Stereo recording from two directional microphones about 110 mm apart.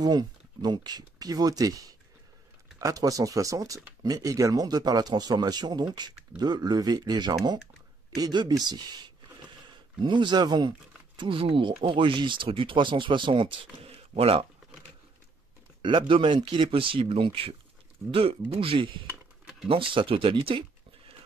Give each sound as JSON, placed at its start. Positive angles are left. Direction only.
{"t": 0.0, "sound": "speech", "side_deg": -40}
{"t": 11.1, "sound": "speech", "side_deg": -55}
{"t": 15.8, "sound": "speech", "side_deg": -50}